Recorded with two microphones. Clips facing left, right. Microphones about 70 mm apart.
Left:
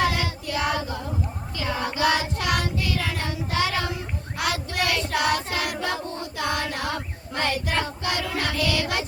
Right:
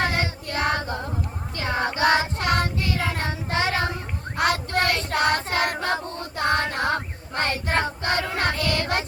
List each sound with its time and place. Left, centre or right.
0.0 s child singing: right